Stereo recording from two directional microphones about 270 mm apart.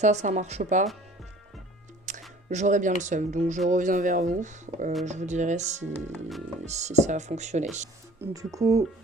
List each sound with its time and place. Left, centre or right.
0.0 s speech: right
2.1 s music: right
2.5 s speech: right
6.1 s speech: centre
6.7 s speech: right
8.2 s speech: centre